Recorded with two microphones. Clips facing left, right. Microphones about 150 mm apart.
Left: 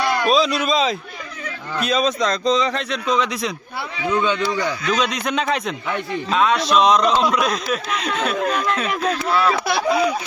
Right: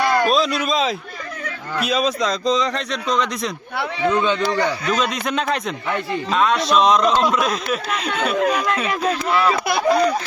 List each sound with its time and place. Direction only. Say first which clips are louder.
0.0 s a sound: right 3 dB; 50° right (ahead or behind)
0.3 s a man's voice: left 1 dB; centre (ahead or behind)
4.1 s speech: left 1 dB; 15° right (ahead or behind)
4.9 s a man's voice: even; centre (ahead or behind)